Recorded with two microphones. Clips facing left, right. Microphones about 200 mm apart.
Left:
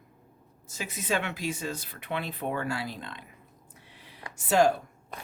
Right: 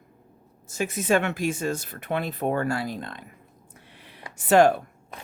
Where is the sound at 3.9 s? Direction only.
65° right (ahead or behind).